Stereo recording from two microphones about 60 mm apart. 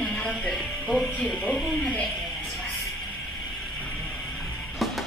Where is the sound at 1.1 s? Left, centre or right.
Centre.